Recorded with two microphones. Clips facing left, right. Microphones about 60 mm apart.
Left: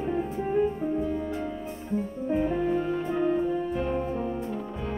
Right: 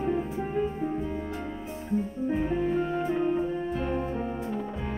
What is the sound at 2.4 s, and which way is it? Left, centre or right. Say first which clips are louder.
Music: left 1 dB; centre.